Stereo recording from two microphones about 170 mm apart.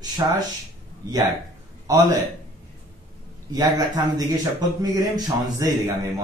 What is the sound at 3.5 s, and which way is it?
A man's voice, 25° right (ahead or behind).